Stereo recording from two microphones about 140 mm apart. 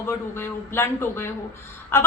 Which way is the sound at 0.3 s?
15° left (ahead or behind).